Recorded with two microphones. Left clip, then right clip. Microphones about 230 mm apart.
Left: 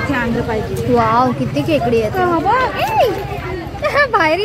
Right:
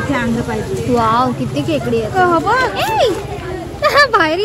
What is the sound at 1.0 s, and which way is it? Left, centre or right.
Speech, centre.